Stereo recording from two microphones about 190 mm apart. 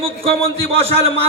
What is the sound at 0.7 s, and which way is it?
Speech, 30° right (ahead or behind).